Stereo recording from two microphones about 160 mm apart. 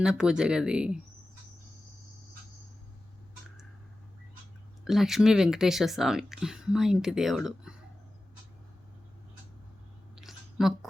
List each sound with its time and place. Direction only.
0.0 s speech: 5° right (ahead or behind)
4.9 s speech: centre (ahead or behind)
10.2 s a sound: centre (ahead or behind)